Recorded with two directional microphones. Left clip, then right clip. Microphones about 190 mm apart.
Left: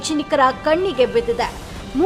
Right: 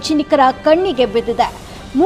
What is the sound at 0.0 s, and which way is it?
A woman's voice, 15° right (ahead or behind).